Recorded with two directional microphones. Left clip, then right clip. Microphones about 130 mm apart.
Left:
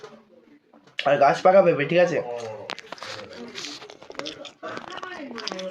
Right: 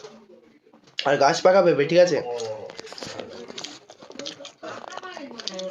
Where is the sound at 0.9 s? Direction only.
55° right (ahead or behind).